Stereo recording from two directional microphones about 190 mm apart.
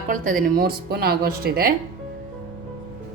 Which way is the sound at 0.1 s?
45° right (ahead or behind).